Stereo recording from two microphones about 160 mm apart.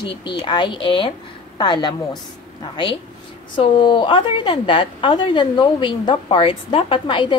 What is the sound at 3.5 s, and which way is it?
A woman's voice, 30° left (ahead or behind).